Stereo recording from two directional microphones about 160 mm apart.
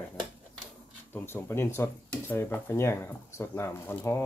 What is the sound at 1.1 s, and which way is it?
Speech, 15° left (ahead or behind).